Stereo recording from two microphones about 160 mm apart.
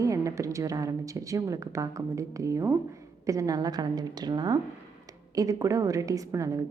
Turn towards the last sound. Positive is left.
turn(degrees=-20)  # may be behind; listen again after turning